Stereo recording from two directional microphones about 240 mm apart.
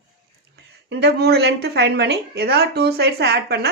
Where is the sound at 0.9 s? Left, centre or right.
Right.